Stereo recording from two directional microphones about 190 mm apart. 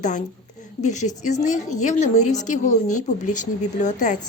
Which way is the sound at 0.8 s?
40° left (ahead or behind).